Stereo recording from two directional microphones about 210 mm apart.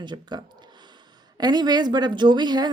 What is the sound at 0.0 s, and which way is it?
A woman's voice, 20° right (ahead or behind).